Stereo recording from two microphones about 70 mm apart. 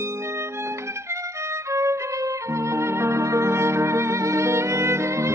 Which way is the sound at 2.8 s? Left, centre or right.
Right.